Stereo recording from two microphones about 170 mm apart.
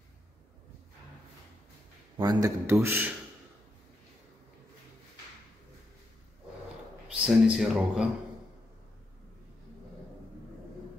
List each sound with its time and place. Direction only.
2.1 s speech: 20° right (ahead or behind)
7.2 s speech: 5° right (ahead or behind)